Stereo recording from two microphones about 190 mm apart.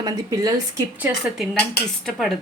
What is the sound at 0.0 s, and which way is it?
A woman's voice, 20° right (ahead or behind).